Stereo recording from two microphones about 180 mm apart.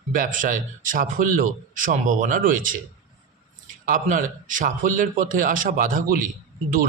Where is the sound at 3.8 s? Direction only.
50° right (ahead or behind).